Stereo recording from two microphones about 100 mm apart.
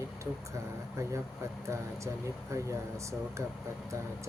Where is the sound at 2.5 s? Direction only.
30° right (ahead or behind).